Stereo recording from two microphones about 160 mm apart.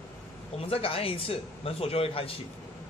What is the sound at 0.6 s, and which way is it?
A man's voice, 35° left (ahead or behind).